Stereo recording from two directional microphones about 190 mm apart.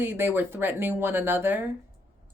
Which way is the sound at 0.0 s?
10° right (ahead or behind).